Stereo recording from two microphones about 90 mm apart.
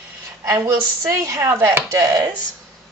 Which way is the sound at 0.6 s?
35° right (ahead or behind).